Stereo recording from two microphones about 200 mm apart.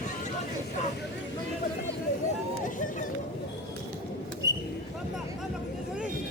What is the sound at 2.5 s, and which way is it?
Run, 40° left (ahead or behind).